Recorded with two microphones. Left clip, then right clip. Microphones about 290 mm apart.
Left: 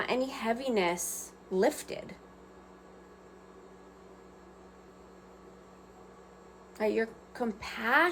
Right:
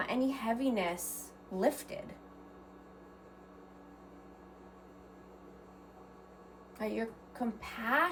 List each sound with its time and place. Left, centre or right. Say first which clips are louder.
0.0 s a woman's voice: left 3 dB; left
6.7 s a woman's voice: left 7 dB; left